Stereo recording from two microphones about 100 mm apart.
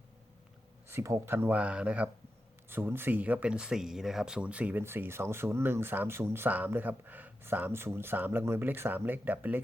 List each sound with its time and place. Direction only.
0.9 s speech: 25° right (ahead or behind)
4.8 s speech: 25° right (ahead or behind)